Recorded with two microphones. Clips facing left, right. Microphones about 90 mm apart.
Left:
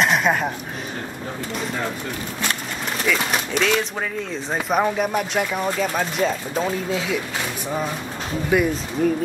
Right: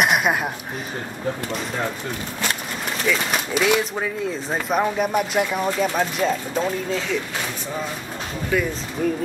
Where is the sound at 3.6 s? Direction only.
5° right (ahead or behind).